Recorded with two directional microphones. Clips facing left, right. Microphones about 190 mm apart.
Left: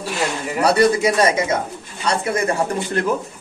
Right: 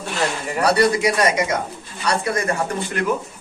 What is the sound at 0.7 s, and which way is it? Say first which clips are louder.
Speech: left 2 dB; 25° left (ahead or behind).